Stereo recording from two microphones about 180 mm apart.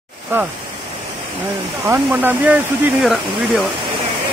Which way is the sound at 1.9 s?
10° right (ahead or behind).